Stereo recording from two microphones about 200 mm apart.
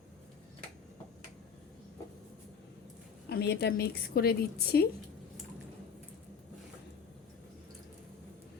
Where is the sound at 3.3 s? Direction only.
55° left (ahead or behind).